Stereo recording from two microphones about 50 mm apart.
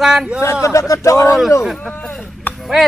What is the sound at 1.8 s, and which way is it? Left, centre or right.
Speech, left.